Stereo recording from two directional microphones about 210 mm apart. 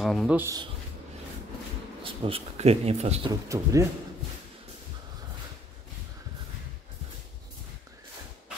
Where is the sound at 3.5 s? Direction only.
15° right (ahead or behind).